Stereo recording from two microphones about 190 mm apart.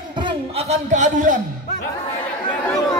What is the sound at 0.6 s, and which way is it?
Speech, 35° right (ahead or behind).